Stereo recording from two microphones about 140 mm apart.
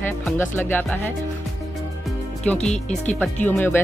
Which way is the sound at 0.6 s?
15° left (ahead or behind).